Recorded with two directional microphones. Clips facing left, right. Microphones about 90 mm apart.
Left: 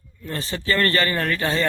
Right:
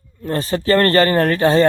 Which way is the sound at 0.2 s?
40° right (ahead or behind).